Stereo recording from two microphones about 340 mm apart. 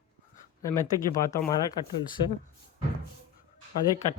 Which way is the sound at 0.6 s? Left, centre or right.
Centre.